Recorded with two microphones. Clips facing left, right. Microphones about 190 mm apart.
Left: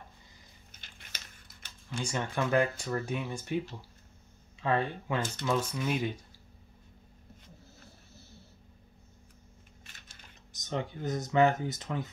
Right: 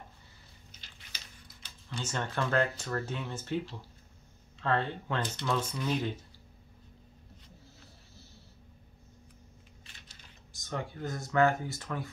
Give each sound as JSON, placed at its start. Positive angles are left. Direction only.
{"t": 0.7, "sound": "a sound", "side_deg": 50}
{"t": 2.0, "sound": "speech", "side_deg": 10}
{"t": 10.5, "sound": "speech", "side_deg": 20}